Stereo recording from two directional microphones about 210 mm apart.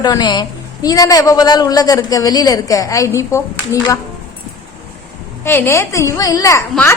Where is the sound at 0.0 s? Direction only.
20° left (ahead or behind).